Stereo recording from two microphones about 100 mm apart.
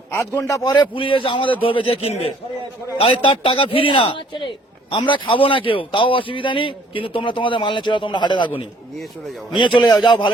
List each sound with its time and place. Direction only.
0.1 s a man's voice: 25° left (ahead or behind)
0.9 s a man's voice: 60° left (ahead or behind); by 2.3 s 85° left
3.0 s a man's voice: 65° left (ahead or behind); by 10.2 s 50° left (ahead or behind)